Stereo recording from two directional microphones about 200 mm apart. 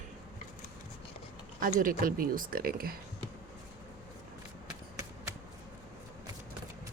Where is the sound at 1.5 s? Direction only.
45° right (ahead or behind).